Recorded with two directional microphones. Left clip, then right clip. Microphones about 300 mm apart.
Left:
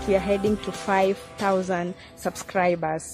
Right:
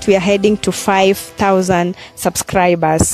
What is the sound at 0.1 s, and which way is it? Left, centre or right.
Speech, right.